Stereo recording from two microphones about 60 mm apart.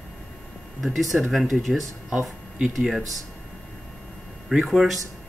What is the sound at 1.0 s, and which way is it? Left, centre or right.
Speech, centre.